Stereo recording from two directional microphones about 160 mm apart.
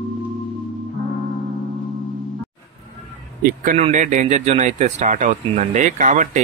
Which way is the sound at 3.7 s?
45° right (ahead or behind).